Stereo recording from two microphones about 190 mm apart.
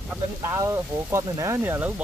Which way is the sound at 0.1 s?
15° right (ahead or behind).